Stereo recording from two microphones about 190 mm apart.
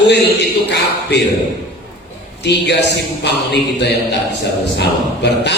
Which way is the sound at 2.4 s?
60° left (ahead or behind).